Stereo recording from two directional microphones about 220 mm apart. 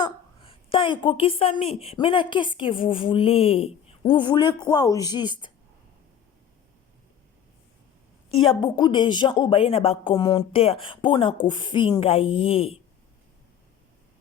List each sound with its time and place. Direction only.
0.0 s a woman's voice: 25° left (ahead or behind)
8.6 s a woman's voice: 20° left (ahead or behind)